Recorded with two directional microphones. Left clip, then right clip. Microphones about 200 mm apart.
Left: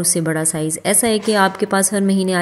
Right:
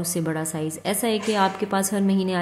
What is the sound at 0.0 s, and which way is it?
A woman's voice, 20° left (ahead or behind).